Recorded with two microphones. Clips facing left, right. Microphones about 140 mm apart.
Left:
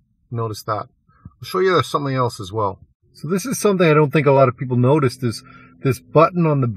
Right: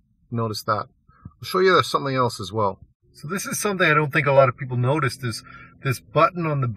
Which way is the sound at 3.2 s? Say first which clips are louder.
Left 9 dB; 25° left (ahead or behind).